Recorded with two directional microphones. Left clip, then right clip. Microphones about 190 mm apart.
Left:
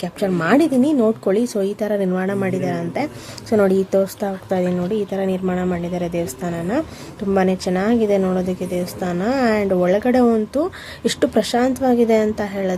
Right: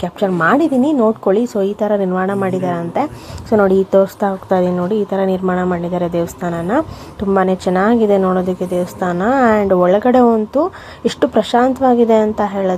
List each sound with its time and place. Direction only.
0.3 s a woman's voice: 5° left (ahead or behind)
10.2 s speech: 15° left (ahead or behind)
11.3 s a woman's voice: centre (ahead or behind)